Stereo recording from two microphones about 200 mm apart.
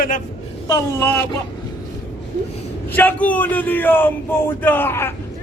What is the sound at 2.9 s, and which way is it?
A man's voice, 10° left (ahead or behind).